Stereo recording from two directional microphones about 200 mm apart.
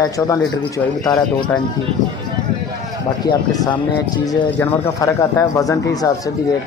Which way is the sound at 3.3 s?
20° left (ahead or behind).